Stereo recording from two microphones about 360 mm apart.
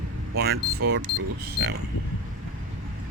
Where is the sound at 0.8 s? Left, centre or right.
Right.